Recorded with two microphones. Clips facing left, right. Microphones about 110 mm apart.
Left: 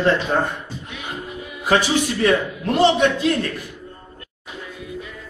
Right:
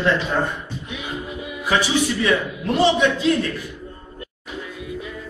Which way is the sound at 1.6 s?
45° left (ahead or behind).